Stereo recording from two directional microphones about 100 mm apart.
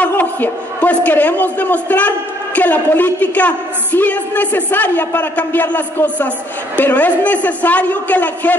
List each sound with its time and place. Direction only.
0.0 s a man's voice: 15° left (ahead or behind)